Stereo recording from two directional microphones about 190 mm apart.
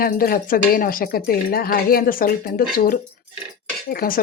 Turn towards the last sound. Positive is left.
turn(degrees=50)  # may be behind; listen again after turning